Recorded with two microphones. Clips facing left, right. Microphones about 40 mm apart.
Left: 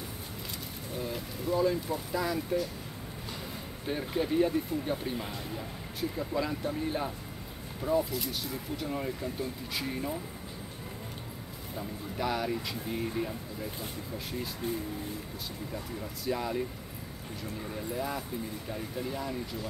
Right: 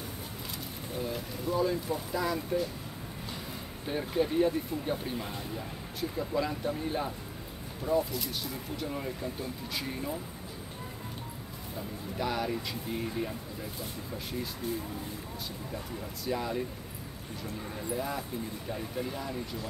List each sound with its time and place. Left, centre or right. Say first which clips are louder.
0.9 s speech: right 1 dB; centre
3.8 s speech: right 2 dB; centre
12.2 s speech: left 1 dB; centre
14.6 s speech: left 1 dB; left
15.7 s speech: even; centre
17.7 s speech: right 1 dB; centre